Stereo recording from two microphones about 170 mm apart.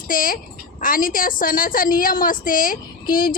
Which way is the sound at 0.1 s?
55° left (ahead or behind).